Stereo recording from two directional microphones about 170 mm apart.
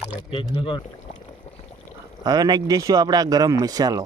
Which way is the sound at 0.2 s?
30° left (ahead or behind).